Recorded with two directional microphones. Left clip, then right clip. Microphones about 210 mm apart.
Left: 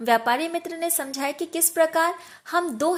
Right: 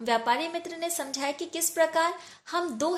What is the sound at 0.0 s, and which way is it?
A woman's voice, 25° left (ahead or behind).